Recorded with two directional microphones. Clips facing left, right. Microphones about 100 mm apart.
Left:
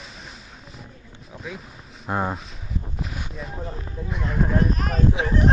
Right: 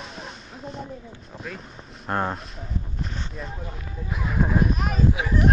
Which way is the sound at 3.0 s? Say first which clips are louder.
Even; 5° left (ahead or behind).